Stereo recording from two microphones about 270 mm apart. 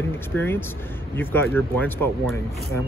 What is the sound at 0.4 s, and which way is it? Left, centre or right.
Speech, centre.